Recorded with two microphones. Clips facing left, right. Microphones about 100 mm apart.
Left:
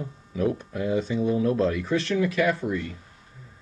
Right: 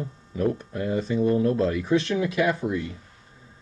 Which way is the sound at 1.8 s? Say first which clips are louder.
Right 1 dB; 15° right (ahead or behind).